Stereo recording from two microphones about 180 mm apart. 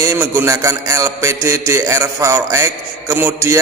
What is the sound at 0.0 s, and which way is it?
A man's voice, 15° right (ahead or behind).